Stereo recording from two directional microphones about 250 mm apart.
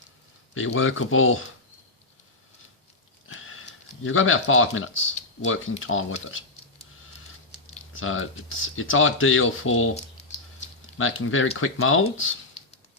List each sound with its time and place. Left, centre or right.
0.5 s speech: left
3.2 s sniff: left
4.0 s speech: left
7.9 s speech: left
9.9 s a sound: left
10.9 s speech: left